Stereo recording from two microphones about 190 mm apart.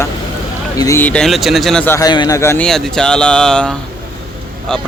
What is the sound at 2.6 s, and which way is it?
Speech, centre (ahead or behind).